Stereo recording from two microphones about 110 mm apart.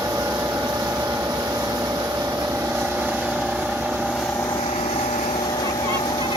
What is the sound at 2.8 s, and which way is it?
Vehicle, 10° right (ahead or behind).